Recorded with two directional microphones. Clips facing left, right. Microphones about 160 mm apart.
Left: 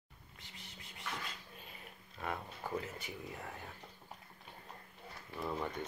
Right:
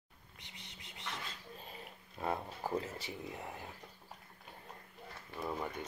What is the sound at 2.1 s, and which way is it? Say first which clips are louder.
Speech: right 4 dB; 30° right (ahead or behind).